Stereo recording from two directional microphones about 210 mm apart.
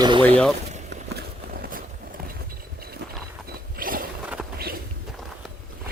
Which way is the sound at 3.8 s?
40° right (ahead or behind).